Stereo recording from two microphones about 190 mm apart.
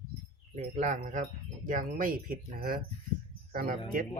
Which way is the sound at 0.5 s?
40° right (ahead or behind).